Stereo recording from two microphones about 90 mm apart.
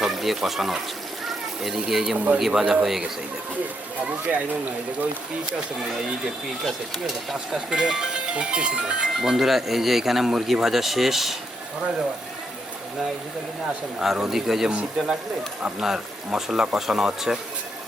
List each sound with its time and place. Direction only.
0.0 s speech: centre (ahead or behind)
2.1 s speech: 15° right (ahead or behind)
7.3 s speech: 10° right (ahead or behind)
14.0 s speech: 5° right (ahead or behind)